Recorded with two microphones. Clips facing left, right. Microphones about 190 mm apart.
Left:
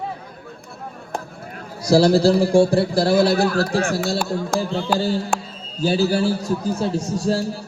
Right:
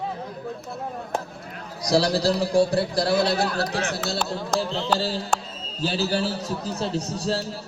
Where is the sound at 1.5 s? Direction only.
50° left (ahead or behind).